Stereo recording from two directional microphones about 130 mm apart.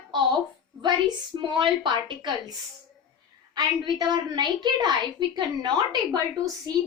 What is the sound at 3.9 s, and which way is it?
A woman's voice, 35° right (ahead or behind).